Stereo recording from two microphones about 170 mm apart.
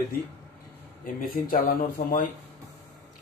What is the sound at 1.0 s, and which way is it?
Speech, 55° left (ahead or behind).